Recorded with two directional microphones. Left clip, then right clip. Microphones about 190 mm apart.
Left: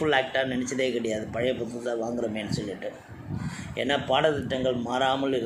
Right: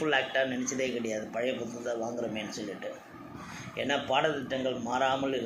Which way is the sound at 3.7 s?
55° left (ahead or behind).